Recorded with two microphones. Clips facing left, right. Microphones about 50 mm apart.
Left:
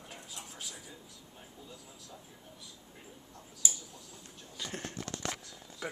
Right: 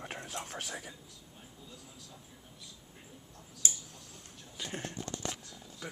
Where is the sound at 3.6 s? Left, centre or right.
Right.